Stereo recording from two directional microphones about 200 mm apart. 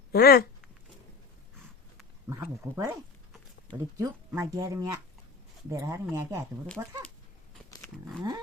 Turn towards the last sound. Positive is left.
turn(degrees=-15)  # may be behind; listen again after turning